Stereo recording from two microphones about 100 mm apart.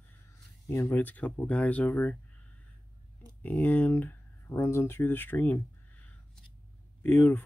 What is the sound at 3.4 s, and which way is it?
Speech, 20° left (ahead or behind).